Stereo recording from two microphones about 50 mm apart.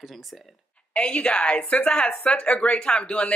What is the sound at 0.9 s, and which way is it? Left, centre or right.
Speech, left.